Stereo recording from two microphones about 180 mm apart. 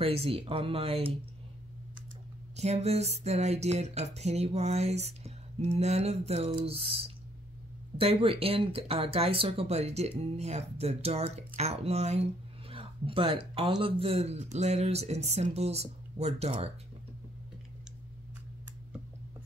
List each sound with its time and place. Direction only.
0.0 s speech: 30° right (ahead or behind)
2.5 s speech: 35° right (ahead or behind)